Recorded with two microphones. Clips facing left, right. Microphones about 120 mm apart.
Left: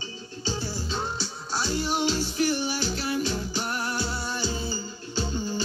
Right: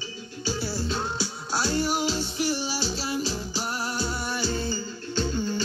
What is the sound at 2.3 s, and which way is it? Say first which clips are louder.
Music: left 2 dB; 30° right (ahead or behind).